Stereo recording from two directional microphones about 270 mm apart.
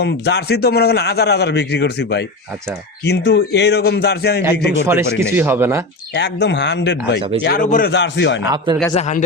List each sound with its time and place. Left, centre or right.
0.0 s speech: left
5.2 s speech: centre
6.1 s speech: left
7.2 s speech: centre
7.4 s speech: left
8.4 s speech: centre
8.9 s a man's voice: left